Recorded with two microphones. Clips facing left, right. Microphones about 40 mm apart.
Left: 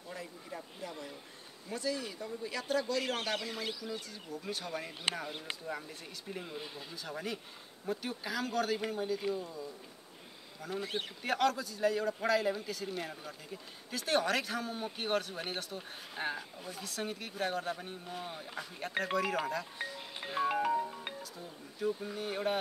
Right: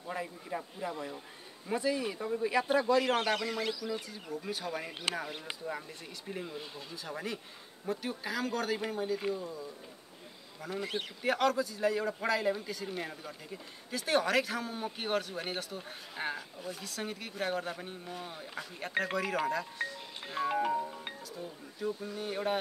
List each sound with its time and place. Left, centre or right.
0.1 s a man's voice: right
4.1 s a man's voice: centre
19.8 s a man's voice: centre